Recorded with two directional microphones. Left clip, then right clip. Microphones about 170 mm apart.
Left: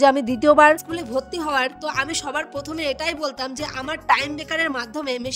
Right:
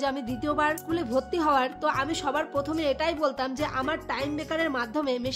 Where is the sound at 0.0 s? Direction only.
40° left (ahead or behind).